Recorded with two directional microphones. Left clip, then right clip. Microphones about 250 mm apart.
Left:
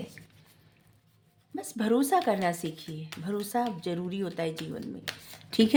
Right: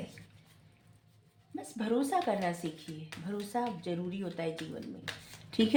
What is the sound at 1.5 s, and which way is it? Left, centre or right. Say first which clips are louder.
Speech: left 5 dB; left.